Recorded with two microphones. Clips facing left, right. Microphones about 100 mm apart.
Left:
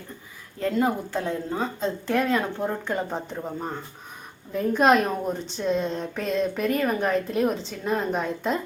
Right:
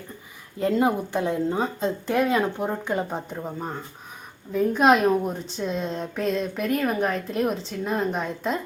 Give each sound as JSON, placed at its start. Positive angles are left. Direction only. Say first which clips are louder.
{"t": 0.6, "sound": "a woman's voice", "louder": "right 2 dB", "side_deg": -20}